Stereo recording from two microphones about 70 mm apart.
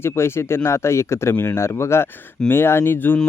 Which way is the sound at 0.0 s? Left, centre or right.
Left.